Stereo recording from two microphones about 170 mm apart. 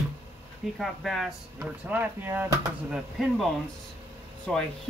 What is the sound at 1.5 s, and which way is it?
Speech, 10° right (ahead or behind).